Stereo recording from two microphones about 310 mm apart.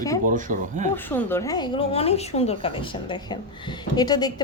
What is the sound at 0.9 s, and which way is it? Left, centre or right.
A woman's voice, centre.